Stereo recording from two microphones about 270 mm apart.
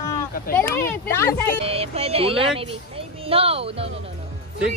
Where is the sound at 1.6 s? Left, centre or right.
Right.